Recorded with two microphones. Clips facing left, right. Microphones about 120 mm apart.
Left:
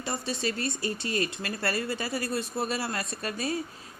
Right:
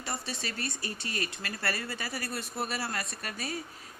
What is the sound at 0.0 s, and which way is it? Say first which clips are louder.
Speech: left 6 dB; 20° left (ahead or behind).